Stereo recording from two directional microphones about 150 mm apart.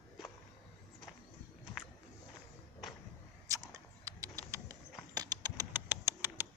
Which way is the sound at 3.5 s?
20° right (ahead or behind).